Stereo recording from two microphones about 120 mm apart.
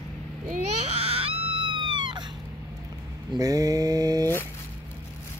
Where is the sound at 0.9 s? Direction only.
55° right (ahead or behind); by 4.3 s 30° right (ahead or behind).